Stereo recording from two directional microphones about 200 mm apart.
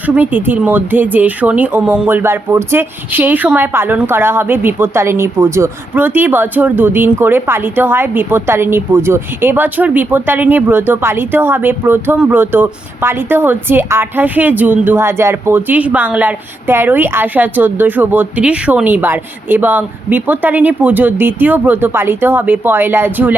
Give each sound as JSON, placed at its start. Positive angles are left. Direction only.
{"t": 0.2, "sound": "speech", "side_deg": -10}